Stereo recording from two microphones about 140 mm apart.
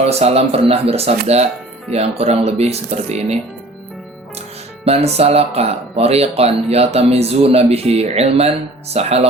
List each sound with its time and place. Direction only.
0.0 s speech: 50° right (ahead or behind)
4.9 s speech: 45° right (ahead or behind)